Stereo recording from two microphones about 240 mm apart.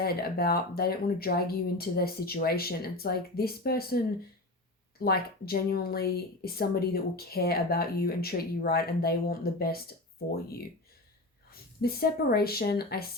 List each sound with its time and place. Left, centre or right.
0.0 s a woman's voice: left
5.0 s a woman's voice: left
11.8 s a woman's voice: left